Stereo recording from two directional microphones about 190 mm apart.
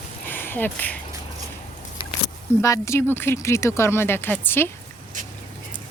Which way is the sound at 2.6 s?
15° left (ahead or behind).